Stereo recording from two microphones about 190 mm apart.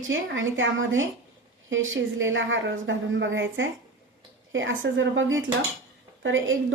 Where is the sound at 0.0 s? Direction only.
90° right.